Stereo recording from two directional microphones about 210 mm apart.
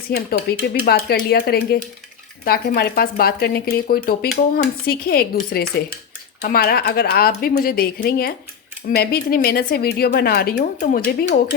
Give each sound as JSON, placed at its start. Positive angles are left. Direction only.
{"t": 0.1, "sound": "speech", "side_deg": 50}